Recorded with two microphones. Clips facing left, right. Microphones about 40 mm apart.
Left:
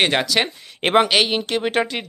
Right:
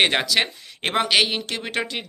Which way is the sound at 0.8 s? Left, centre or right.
Left.